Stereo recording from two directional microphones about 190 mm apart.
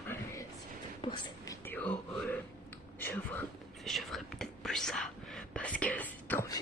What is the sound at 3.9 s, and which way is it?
Whispering, centre (ahead or behind).